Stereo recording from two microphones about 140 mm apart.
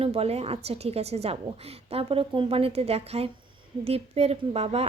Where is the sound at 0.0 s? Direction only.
45° right (ahead or behind).